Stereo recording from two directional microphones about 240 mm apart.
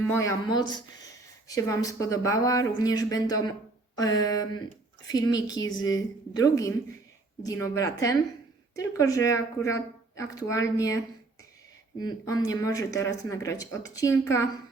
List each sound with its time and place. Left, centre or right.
0.1 s speech: centre